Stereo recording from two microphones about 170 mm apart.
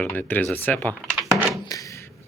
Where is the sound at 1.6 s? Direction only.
20° left (ahead or behind).